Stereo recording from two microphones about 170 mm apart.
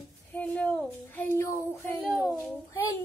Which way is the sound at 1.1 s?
10° left (ahead or behind).